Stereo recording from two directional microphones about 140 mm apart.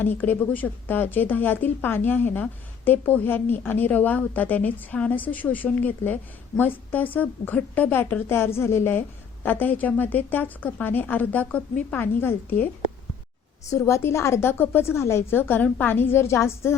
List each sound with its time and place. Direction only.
0.0 s speech: 15° left (ahead or behind)
13.7 s speech: 20° left (ahead or behind)